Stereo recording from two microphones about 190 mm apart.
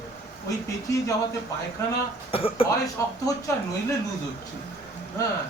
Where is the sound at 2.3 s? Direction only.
30° left (ahead or behind).